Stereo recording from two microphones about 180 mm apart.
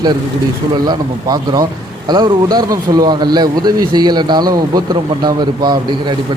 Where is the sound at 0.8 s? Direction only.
20° right (ahead or behind).